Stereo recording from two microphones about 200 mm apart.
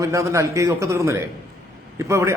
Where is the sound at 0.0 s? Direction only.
15° right (ahead or behind).